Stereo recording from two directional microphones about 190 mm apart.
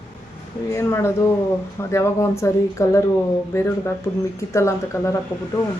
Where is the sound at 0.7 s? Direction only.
15° left (ahead or behind).